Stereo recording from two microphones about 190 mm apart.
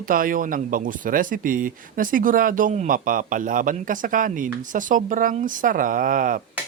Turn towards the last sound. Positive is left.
turn(degrees=-45)  # may be behind; listen again after turning